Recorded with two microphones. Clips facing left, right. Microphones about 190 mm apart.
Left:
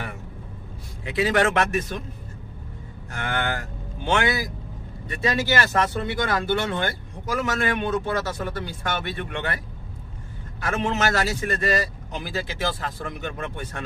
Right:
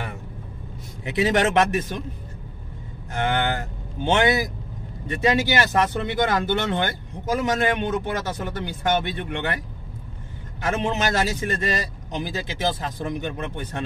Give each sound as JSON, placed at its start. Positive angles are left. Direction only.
{"t": 1.0, "sound": "speech", "side_deg": -25}
{"t": 3.1, "sound": "speech", "side_deg": -20}
{"t": 10.7, "sound": "speech", "side_deg": -20}